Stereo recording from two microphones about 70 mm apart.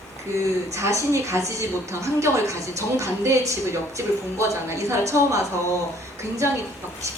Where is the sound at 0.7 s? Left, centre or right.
Right.